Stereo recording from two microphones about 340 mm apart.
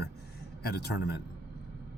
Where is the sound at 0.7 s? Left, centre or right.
Left.